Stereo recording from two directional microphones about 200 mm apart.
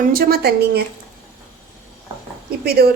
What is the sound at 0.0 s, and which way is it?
Speech, 45° right (ahead or behind).